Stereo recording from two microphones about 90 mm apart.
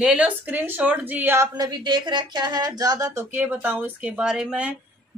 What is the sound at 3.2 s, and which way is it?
A woman's voice, 20° right (ahead or behind).